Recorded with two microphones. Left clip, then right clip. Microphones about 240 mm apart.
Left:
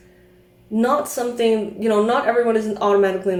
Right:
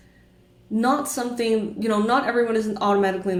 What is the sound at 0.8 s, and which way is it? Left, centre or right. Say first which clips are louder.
Speech: left 3 dB; right.